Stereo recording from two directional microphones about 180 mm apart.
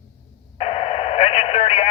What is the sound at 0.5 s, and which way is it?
Radio, 35° left (ahead or behind).